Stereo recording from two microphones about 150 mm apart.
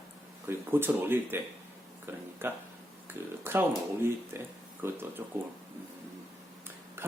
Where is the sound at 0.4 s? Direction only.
15° right (ahead or behind).